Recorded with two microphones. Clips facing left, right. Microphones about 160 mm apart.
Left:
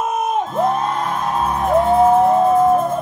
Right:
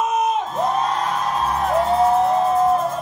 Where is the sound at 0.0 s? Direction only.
50° left (ahead or behind).